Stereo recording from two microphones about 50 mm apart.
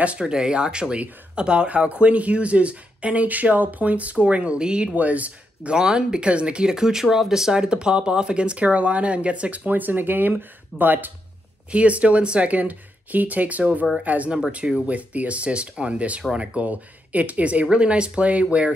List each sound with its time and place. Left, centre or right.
0.0 s speech: centre
4.9 s speech: right
5.8 s speech: centre; by 11.1 s right
11.7 s speech: right